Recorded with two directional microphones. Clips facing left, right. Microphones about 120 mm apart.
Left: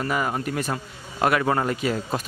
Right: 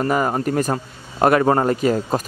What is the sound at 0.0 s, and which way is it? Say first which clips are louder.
A man's voice: right 6 dB; 40° right (ahead or behind).